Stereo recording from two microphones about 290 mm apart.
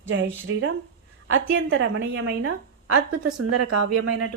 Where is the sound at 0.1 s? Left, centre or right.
Right.